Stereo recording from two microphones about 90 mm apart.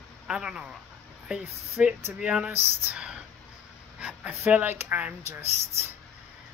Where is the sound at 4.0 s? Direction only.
15° right (ahead or behind).